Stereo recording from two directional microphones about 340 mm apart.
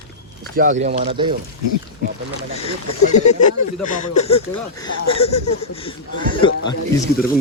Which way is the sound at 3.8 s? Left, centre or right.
Left.